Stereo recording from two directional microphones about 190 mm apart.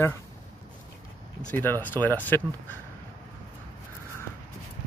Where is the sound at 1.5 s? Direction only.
10° left (ahead or behind).